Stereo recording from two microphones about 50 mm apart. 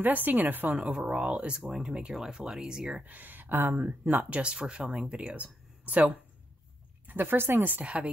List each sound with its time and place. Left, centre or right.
0.0 s speech: right
0.7 s speech: centre
3.0 s speech: right
4.4 s speech: centre
7.1 s a woman's voice: right
7.6 s speech: right